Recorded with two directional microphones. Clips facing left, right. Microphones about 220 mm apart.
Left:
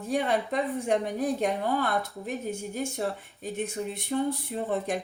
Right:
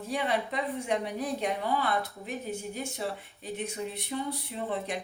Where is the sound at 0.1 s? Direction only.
45° left (ahead or behind).